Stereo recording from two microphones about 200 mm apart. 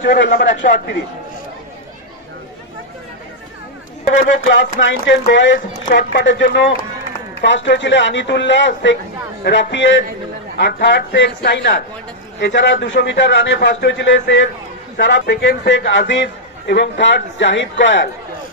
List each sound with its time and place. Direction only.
0.0 s a man's voice: 60° left (ahead or behind); by 0.8 s 45° left (ahead or behind)
4.5 s a man's voice: 65° left (ahead or behind)
6.4 s a man's voice: 50° left (ahead or behind)
7.4 s a man's voice: 65° left (ahead or behind)